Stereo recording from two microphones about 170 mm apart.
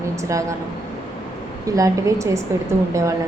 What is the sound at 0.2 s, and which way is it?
Speech, 20° right (ahead or behind).